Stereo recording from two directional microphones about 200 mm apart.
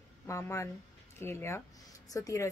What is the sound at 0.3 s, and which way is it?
Speech, 15° left (ahead or behind).